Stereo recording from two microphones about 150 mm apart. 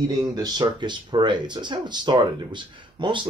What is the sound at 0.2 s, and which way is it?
Speech, 25° right (ahead or behind).